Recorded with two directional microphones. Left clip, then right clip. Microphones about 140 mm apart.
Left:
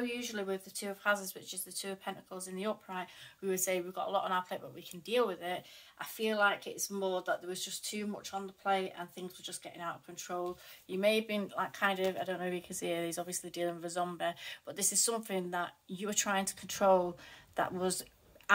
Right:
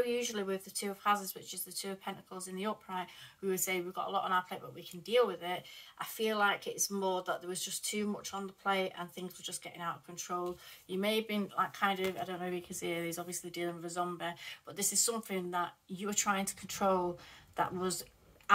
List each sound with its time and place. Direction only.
0.1 s speech: 25° left (ahead or behind)